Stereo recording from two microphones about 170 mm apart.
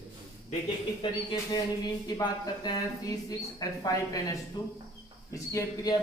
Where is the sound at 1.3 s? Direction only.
25° left (ahead or behind).